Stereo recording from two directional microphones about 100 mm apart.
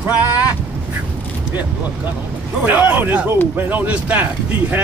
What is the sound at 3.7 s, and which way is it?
Speech, 15° right (ahead or behind).